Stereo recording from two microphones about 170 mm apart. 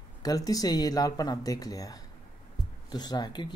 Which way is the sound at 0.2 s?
20° left (ahead or behind).